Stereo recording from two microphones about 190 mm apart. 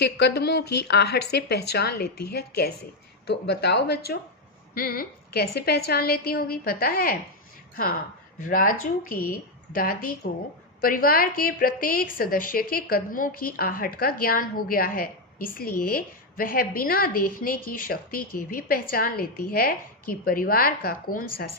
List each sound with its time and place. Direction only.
0.0 s a woman's voice: 60° left (ahead or behind)
8.4 s a woman's voice: 45° left (ahead or behind)